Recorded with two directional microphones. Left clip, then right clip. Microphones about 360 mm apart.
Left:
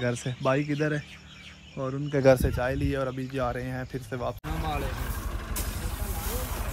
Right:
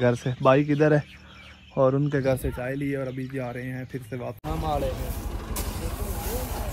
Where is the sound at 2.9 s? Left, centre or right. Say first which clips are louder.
Left 1 dB; centre.